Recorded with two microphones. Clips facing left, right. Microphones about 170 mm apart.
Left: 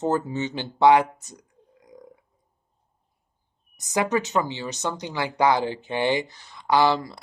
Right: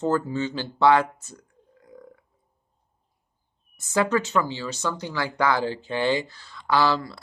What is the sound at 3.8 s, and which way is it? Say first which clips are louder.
Speech: right 1 dB; 15° left (ahead or behind).